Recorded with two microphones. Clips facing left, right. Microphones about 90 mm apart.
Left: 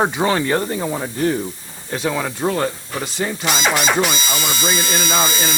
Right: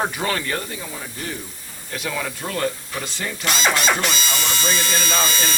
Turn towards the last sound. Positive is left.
turn(degrees=15)  # may be behind; listen again after turning